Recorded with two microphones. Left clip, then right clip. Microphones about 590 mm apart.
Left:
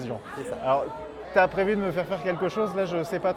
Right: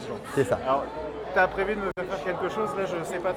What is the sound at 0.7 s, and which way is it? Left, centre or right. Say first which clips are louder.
Speech: left 1 dB; left.